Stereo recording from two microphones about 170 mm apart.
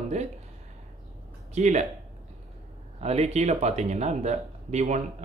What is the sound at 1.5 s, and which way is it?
Speech, 45° right (ahead or behind).